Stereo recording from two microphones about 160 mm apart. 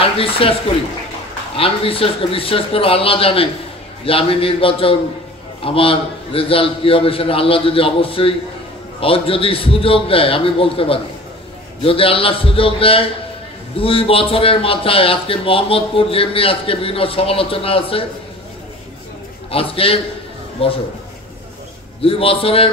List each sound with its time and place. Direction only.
0.0 s a man's voice: 35° left (ahead or behind)
1.6 s a man's voice: 35° left (ahead or behind)
19.5 s a man's voice: 35° left (ahead or behind)
22.0 s a man's voice: 35° left (ahead or behind)